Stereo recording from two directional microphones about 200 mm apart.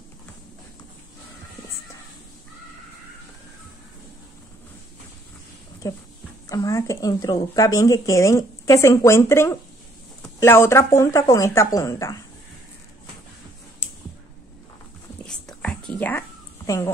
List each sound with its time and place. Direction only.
5.8 s speech: 15° left (ahead or behind)
15.2 s whispering: 5° left (ahead or behind)